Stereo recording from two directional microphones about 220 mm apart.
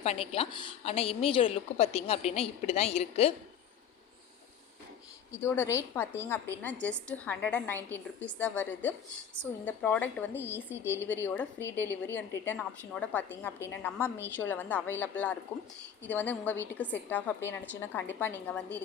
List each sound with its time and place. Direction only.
0.0 s a woman's voice: 25° left (ahead or behind)
5.3 s a woman's voice: 10° left (ahead or behind)